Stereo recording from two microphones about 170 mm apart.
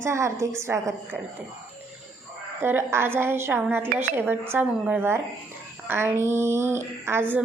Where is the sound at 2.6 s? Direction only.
15° right (ahead or behind).